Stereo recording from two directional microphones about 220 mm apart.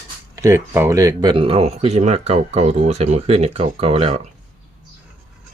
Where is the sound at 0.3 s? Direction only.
15° right (ahead or behind); by 4.2 s 30° right (ahead or behind).